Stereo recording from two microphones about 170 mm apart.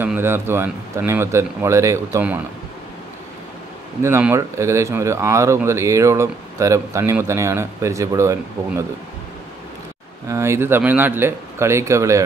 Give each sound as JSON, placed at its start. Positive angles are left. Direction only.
{"t": 0.0, "sound": "speech", "side_deg": -15}
{"t": 4.0, "sound": "speech", "side_deg": -15}
{"t": 10.3, "sound": "speech", "side_deg": -15}